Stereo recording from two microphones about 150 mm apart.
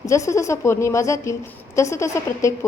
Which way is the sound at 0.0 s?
20° left (ahead or behind).